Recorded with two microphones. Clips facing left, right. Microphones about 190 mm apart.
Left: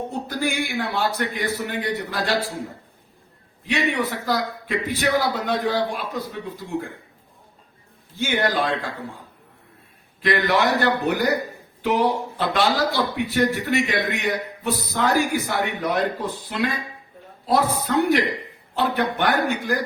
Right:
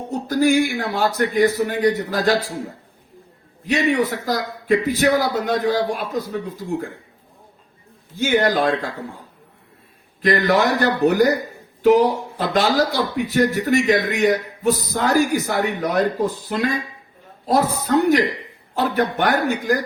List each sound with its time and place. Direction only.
0.1 s a man's voice: 45° right (ahead or behind)
3.7 s a man's voice: 40° right (ahead or behind)
8.2 s a man's voice: 45° right (ahead or behind)
10.2 s a man's voice: 40° right (ahead or behind)